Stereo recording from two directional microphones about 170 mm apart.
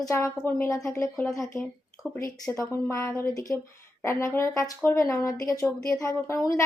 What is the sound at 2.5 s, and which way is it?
A woman's voice, 15° left (ahead or behind).